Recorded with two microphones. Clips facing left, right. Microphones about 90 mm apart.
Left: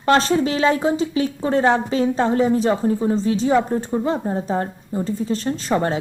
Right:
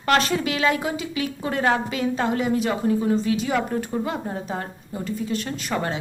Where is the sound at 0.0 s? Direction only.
30° left (ahead or behind).